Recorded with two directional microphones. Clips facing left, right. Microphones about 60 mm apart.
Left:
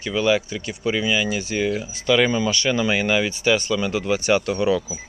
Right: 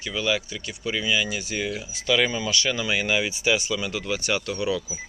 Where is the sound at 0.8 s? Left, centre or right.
Centre.